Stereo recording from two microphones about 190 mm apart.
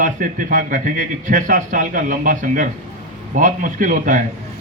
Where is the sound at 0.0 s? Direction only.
45° right (ahead or behind).